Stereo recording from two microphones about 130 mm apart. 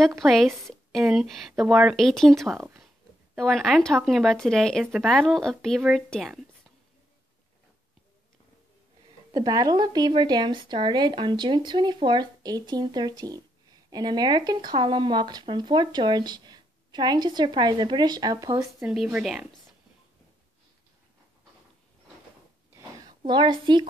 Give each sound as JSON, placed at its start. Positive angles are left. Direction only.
{"t": 0.2, "sound": "speech", "side_deg": 0}
{"t": 2.0, "sound": "speech", "side_deg": 0}
{"t": 2.5, "sound": "speech", "side_deg": -20}
{"t": 3.3, "sound": "speech", "side_deg": 0}
{"t": 9.3, "sound": "speech", "side_deg": -30}
{"t": 18.8, "sound": "speech", "side_deg": -5}
{"t": 22.8, "sound": "a sound", "side_deg": -30}